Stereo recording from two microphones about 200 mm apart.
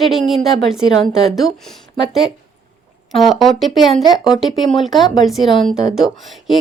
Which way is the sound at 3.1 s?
Centre (ahead or behind).